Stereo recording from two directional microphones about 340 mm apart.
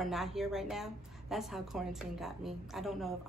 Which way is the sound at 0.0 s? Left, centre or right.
Centre.